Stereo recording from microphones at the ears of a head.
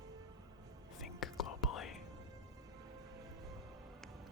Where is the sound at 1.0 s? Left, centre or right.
Left.